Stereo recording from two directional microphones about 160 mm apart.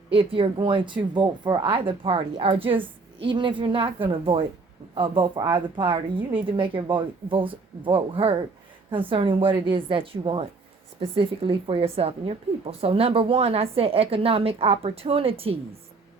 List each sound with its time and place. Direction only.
0.1 s a woman's voice: 35° right (ahead or behind)